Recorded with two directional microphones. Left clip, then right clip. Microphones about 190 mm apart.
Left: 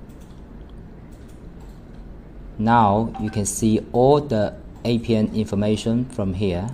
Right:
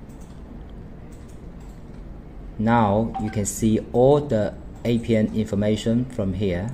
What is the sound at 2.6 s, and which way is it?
Speech, 20° left (ahead or behind).